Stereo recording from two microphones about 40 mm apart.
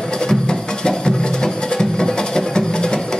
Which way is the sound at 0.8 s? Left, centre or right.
Centre.